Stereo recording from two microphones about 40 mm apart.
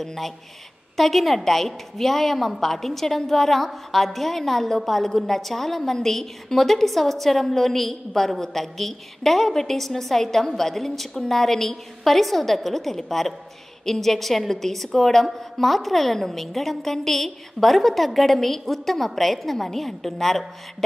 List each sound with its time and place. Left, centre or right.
0.0 s a woman's voice: centre